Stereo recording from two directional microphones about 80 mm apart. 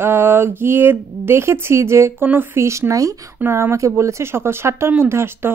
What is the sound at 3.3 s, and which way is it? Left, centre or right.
Speech, right.